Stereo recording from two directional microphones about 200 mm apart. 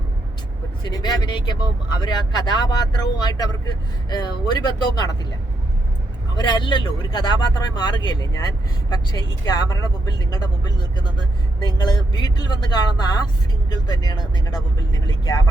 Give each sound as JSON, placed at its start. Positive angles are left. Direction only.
{"t": 0.9, "sound": "speech", "side_deg": 20}
{"t": 6.3, "sound": "speech", "side_deg": 20}